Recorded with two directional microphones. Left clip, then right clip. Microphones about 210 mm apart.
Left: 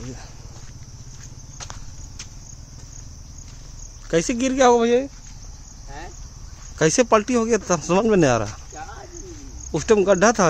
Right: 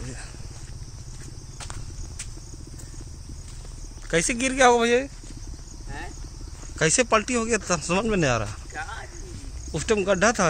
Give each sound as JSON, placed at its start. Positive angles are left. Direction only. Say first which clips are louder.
{"t": 1.6, "sound": "horse", "louder": "left 2 dB", "side_deg": 0}
{"t": 4.1, "sound": "speech", "louder": "left 3 dB", "side_deg": 15}
{"t": 6.8, "sound": "speech", "louder": "left 4 dB", "side_deg": 30}
{"t": 9.7, "sound": "speech", "louder": "left 6 dB", "side_deg": 35}